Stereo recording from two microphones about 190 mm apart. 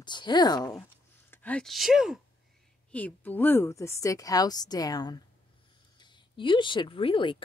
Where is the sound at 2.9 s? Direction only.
10° left (ahead or behind).